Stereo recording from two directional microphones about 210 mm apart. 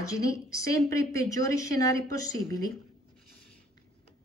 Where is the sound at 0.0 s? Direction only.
15° left (ahead or behind).